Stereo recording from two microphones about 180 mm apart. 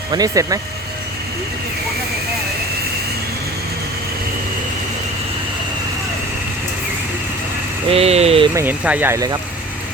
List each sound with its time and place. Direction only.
0.1 s speech: 20° right (ahead or behind)
7.9 s speech: 35° right (ahead or behind)
8.5 s speech: 10° right (ahead or behind)